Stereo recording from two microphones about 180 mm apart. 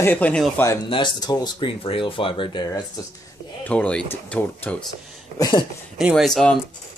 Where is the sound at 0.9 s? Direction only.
25° left (ahead or behind).